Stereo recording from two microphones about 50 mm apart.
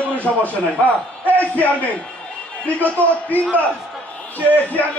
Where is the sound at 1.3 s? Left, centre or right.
Left.